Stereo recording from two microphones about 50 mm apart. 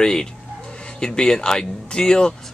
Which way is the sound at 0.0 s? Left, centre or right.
Centre.